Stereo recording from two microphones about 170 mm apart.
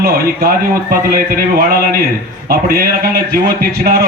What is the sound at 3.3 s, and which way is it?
Speech, 65° right (ahead or behind).